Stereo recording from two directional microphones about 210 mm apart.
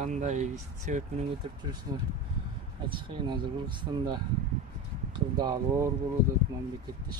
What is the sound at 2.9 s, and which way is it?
Speech, 25° right (ahead or behind).